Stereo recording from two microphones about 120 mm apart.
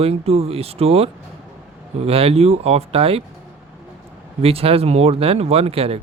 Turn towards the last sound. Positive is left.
turn(degrees=-55)  # may be behind; listen again after turning